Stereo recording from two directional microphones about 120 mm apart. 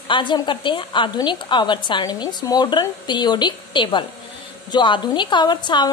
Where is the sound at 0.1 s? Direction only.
40° left (ahead or behind).